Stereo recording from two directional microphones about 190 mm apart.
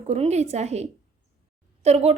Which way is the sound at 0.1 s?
35° right (ahead or behind).